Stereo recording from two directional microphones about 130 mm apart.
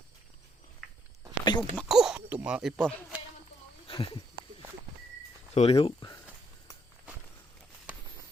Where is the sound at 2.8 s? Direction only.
5° left (ahead or behind).